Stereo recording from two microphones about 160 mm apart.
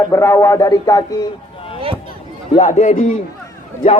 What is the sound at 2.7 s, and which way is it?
Speech, 50° left (ahead or behind).